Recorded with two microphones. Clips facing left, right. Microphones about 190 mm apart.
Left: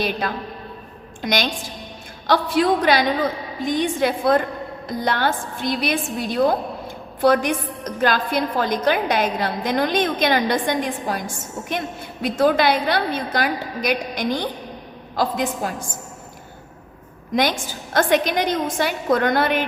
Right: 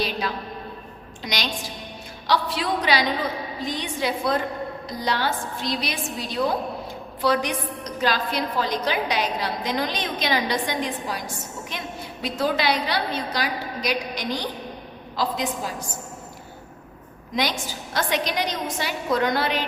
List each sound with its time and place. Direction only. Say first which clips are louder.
0.0 s a woman's voice: left 3 dB; 55° left (ahead or behind)
17.3 s a woman's voice: left 5 dB; 50° left (ahead or behind)